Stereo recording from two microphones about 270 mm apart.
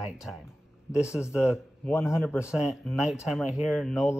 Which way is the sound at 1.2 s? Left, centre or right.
Centre.